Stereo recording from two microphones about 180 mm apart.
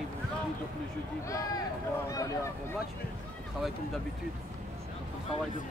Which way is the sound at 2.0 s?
20° left (ahead or behind).